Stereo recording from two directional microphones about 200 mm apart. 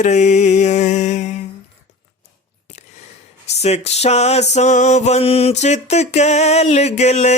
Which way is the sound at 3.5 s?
30° left (ahead or behind).